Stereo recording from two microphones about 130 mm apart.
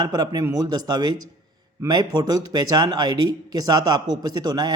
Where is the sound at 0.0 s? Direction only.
30° right (ahead or behind).